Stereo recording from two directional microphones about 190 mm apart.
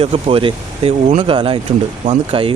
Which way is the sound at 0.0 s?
30° right (ahead or behind).